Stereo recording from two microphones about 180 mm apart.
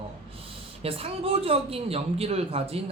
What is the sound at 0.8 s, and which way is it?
Speech, 30° right (ahead or behind).